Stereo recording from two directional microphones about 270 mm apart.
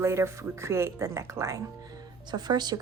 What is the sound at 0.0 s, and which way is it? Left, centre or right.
Speech, centre.